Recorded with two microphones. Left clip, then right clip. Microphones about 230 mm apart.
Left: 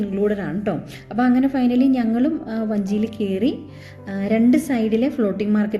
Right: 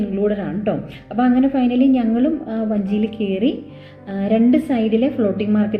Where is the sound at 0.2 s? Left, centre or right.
Left.